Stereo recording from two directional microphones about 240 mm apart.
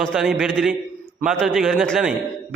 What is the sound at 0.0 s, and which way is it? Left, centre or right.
A man's voice, centre.